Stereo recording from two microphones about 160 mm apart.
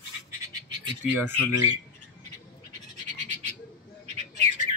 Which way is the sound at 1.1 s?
10° right (ahead or behind).